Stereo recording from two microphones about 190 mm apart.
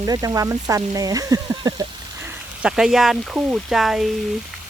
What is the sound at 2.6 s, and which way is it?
Speech, 5° right (ahead or behind).